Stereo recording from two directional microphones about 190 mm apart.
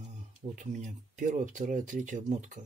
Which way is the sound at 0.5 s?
40° right (ahead or behind).